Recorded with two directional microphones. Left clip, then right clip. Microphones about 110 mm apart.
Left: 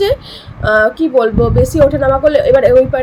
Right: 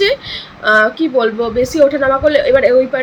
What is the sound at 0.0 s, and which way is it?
A woman's voice, 10° left (ahead or behind).